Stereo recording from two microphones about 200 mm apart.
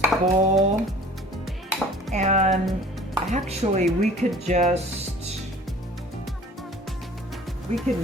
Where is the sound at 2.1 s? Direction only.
35° right (ahead or behind).